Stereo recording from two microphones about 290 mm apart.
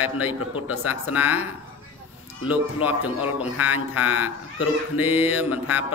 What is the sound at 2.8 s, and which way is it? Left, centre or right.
A man's voice, centre.